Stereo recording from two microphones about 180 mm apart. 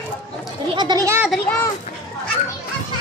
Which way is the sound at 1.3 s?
5° left (ahead or behind).